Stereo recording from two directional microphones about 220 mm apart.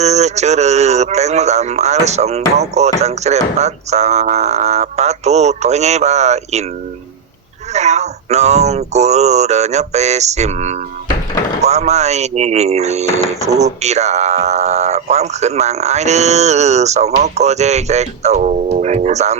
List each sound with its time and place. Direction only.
0.0 s speech: 30° right (ahead or behind)
7.7 s speech: 30° right (ahead or behind)